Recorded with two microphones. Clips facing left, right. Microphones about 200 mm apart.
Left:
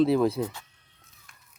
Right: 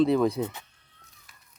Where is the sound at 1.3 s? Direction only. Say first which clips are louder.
Left 2 dB; 5° right (ahead or behind).